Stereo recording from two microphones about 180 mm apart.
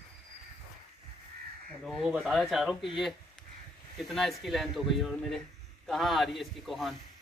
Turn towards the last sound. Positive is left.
turn(degrees=0)  # may be behind; listen again after turning